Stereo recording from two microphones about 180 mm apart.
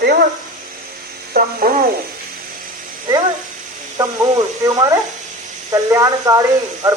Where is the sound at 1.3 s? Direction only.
50° right (ahead or behind).